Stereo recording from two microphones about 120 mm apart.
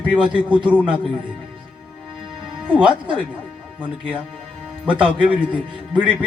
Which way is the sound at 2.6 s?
10° right (ahead or behind).